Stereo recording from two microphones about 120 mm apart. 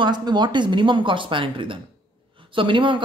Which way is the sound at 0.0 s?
40° right (ahead or behind).